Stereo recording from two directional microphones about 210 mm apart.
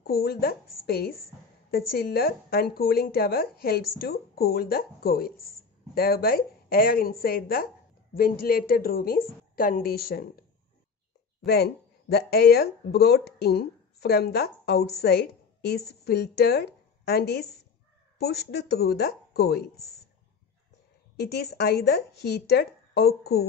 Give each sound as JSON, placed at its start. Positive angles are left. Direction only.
{"t": 0.0, "sound": "a woman's voice", "side_deg": 45}
{"t": 11.4, "sound": "a woman's voice", "side_deg": 50}
{"t": 21.2, "sound": "a woman's voice", "side_deg": 50}